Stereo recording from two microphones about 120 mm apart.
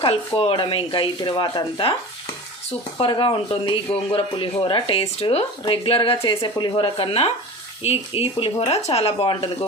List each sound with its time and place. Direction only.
0.3 s speech: 50° left (ahead or behind)
3.0 s speech: 40° left (ahead or behind)